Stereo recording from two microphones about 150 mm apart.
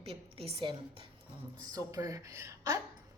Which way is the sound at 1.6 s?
25° right (ahead or behind).